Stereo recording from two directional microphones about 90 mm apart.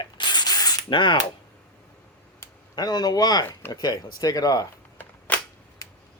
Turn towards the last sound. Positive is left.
turn(degrees=40)  # may be behind; listen again after turning